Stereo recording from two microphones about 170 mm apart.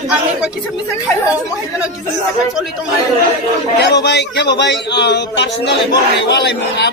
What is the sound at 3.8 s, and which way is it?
A man's voice, 80° left.